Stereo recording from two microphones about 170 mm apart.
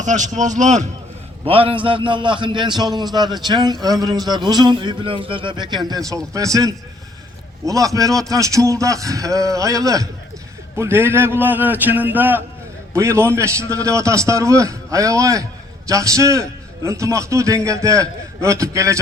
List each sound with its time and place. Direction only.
0.0 s speech: 45° right (ahead or behind)
1.5 s a man's voice: 30° right (ahead or behind)